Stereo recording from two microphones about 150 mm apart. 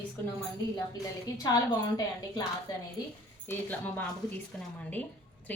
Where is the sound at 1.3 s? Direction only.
25° left (ahead or behind).